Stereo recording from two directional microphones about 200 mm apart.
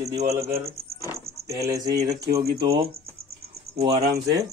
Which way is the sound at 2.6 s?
30° right (ahead or behind).